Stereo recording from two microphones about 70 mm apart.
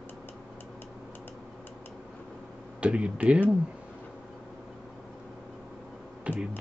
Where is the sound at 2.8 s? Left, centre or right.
Centre.